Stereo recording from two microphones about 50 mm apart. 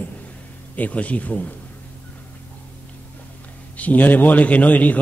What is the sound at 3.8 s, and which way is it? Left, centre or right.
A man's voice, left.